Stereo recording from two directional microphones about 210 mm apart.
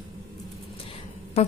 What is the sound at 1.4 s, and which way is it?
Music, 30° left (ahead or behind).